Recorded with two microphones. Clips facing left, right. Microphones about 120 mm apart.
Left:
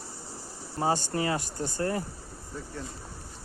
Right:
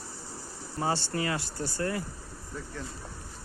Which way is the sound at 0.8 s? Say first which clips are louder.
Left 2 dB; 30° left (ahead or behind).